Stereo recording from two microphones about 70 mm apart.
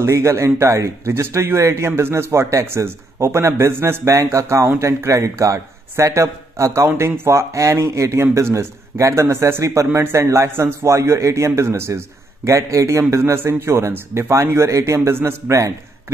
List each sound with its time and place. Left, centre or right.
0.0 s a man's voice: right